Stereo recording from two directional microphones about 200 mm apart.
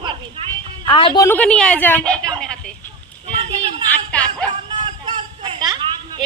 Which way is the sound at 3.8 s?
5° left (ahead or behind).